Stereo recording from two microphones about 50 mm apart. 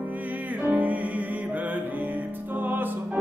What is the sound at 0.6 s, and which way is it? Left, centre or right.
Music, right.